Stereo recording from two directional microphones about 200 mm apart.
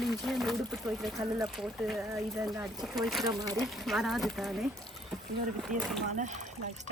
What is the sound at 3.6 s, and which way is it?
Speech, centre (ahead or behind).